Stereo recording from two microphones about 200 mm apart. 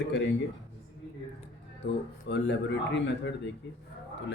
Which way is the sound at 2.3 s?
60° left (ahead or behind).